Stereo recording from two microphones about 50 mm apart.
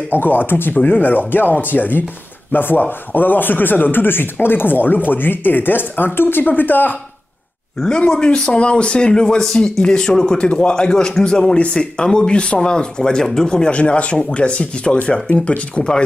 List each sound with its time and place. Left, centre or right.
0.1 s speech: left
7.8 s speech: centre